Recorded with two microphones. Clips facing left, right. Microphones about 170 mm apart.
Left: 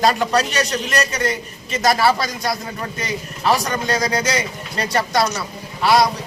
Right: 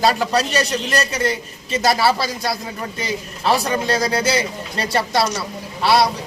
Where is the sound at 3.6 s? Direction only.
10° right (ahead or behind).